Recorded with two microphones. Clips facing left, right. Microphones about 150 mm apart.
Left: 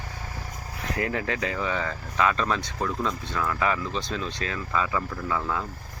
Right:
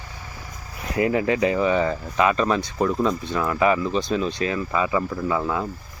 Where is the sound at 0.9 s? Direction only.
10° right (ahead or behind).